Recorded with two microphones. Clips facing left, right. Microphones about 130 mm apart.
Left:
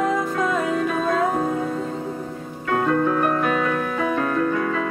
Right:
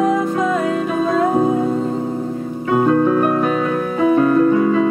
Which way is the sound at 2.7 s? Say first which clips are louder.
Right 6 dB; 20° right (ahead or behind).